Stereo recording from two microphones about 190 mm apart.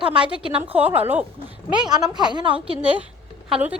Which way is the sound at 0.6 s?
10° right (ahead or behind).